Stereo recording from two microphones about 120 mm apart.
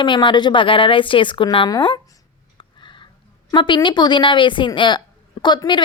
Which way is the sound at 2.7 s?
40° left (ahead or behind).